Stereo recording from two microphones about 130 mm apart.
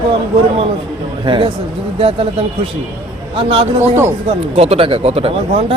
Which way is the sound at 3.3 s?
45° right (ahead or behind).